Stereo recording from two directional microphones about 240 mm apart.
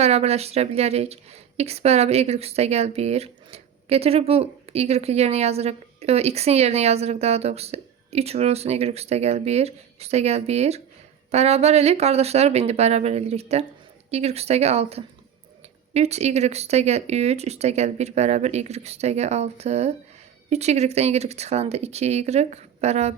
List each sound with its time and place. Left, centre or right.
0.0 s a woman's voice: right